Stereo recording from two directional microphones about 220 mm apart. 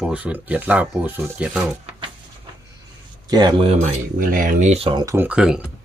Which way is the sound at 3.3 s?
20° right (ahead or behind).